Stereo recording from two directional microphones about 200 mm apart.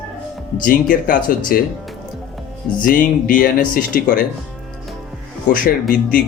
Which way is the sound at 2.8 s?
45° left (ahead or behind).